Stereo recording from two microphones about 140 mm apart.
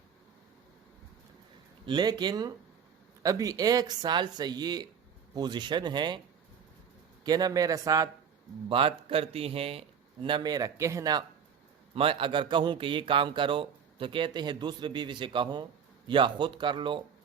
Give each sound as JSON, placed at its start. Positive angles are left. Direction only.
{"t": 1.9, "sound": "a man's voice", "side_deg": -30}
{"t": 7.3, "sound": "speech", "side_deg": -30}
{"t": 8.7, "sound": "a man's voice", "side_deg": -40}
{"t": 11.9, "sound": "a man's voice", "side_deg": -40}